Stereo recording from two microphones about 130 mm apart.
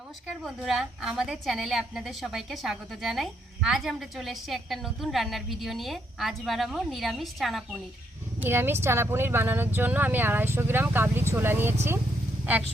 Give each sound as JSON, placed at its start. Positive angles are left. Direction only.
{"t": 0.4, "sound": "a woman's voice", "side_deg": 0}
{"t": 8.4, "sound": "speech", "side_deg": -15}